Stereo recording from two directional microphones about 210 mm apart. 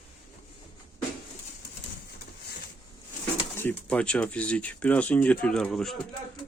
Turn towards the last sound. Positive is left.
turn(degrees=0)  # may be behind; listen again after turning